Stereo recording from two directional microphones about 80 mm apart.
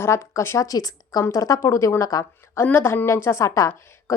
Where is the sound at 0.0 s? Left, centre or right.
Left.